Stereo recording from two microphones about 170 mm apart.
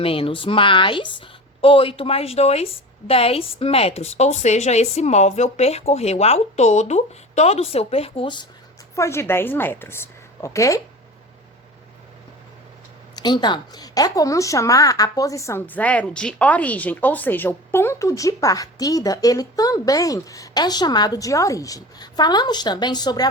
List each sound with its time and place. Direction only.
0.0 s a woman's voice: 35° left (ahead or behind)
9.0 s a woman's voice: 15° left (ahead or behind)
13.1 s speech: 25° left (ahead or behind)